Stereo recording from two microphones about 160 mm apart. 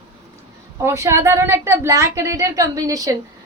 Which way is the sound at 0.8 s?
15° right (ahead or behind).